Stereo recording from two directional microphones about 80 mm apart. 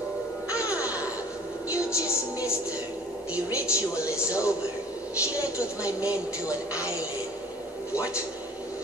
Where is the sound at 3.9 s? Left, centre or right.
Centre.